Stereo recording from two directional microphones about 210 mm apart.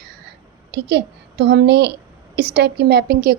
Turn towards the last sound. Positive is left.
turn(degrees=-45)  # may be behind; listen again after turning